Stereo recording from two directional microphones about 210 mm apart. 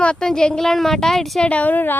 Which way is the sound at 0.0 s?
5° left (ahead or behind).